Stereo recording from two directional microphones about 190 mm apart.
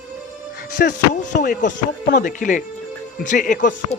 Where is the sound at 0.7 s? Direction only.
50° left (ahead or behind).